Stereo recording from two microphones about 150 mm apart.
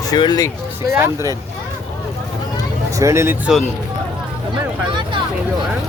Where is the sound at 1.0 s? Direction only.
20° right (ahead or behind).